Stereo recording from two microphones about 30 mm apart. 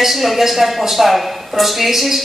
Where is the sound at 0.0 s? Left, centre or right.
Centre.